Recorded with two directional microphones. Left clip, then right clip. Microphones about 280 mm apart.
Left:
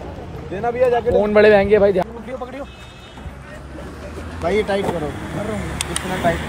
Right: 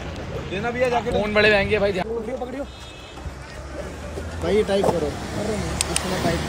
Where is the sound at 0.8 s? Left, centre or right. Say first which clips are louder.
Left 6 dB; left.